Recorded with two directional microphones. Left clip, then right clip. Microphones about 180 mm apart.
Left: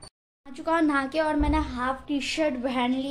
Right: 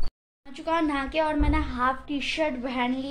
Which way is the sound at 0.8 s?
10° left (ahead or behind).